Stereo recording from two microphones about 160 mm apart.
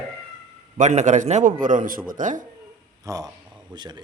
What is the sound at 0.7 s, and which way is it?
A man's voice, 50° right (ahead or behind).